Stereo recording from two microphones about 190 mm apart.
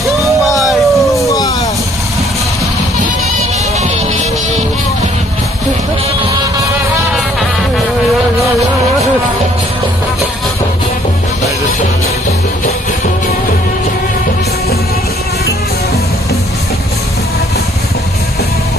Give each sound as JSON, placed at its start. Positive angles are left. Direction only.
{"t": 0.0, "sound": "music", "side_deg": 0}
{"t": 1.2, "sound": "vehicle", "side_deg": 20}